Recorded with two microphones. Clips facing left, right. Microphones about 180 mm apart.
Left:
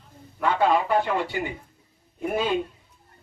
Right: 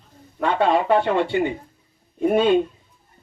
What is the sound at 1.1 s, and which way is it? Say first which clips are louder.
Speech: right 7 dB; 25° right (ahead or behind).